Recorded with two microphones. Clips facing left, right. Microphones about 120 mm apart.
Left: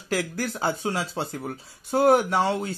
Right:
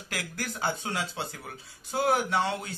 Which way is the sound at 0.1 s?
30° left (ahead or behind).